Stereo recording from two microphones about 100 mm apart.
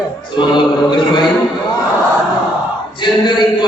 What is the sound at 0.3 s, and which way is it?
Chant, 50° left (ahead or behind).